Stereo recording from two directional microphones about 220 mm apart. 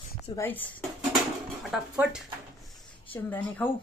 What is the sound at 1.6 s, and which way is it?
Speech, centre (ahead or behind).